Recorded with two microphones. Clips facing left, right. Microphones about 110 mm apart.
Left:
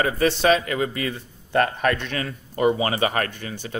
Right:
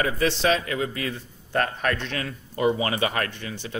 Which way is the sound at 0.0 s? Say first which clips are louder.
Left 3 dB; 50° left (ahead or behind).